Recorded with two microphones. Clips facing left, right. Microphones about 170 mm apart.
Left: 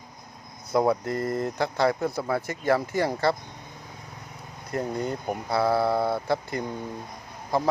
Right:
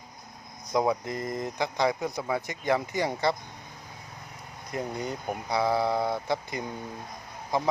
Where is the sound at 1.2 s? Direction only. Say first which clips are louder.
Left 5 dB; 60° left (ahead or behind).